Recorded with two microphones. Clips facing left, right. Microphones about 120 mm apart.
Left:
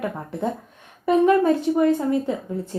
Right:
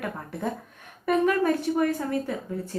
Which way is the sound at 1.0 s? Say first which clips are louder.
Left 6 dB; 20° left (ahead or behind).